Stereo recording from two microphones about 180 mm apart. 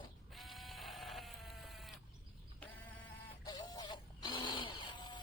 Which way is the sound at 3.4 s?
20° left (ahead or behind).